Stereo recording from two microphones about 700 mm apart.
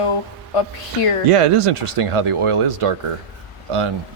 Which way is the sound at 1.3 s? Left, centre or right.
Right.